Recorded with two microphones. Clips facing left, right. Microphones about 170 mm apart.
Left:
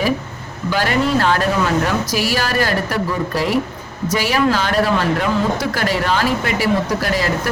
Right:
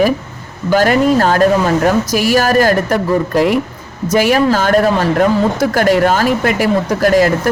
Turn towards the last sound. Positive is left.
turn(degrees=-50)  # may be behind; listen again after turning